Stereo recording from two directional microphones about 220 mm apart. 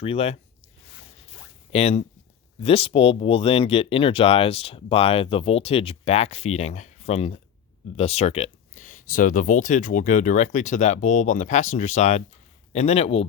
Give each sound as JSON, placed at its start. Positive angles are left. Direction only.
{"t": 0.0, "sound": "speech", "side_deg": 30}
{"t": 1.7, "sound": "speech", "side_deg": 30}